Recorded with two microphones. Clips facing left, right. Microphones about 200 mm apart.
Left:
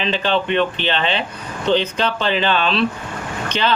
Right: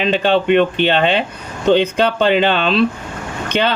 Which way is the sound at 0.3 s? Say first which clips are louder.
Right 6 dB; 50° right (ahead or behind).